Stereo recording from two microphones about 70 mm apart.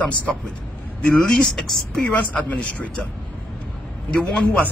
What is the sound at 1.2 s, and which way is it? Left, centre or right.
Speech, centre.